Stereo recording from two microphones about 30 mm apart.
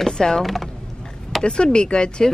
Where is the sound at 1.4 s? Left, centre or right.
Left.